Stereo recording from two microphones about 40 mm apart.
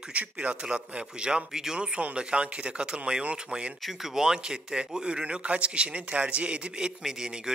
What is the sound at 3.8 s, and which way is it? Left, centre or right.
Speech, centre.